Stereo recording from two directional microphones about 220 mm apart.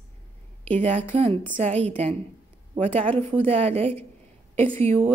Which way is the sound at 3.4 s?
25° right (ahead or behind).